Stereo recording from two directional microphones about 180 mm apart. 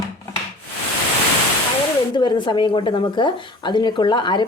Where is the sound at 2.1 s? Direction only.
25° left (ahead or behind).